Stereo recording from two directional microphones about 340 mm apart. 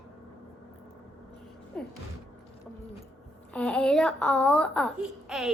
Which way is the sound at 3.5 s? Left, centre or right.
Centre.